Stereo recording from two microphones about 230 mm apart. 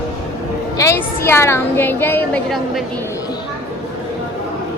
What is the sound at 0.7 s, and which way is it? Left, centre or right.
A woman's voice, centre.